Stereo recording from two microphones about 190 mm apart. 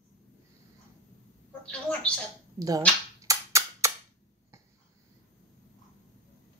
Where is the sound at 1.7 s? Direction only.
5° left (ahead or behind).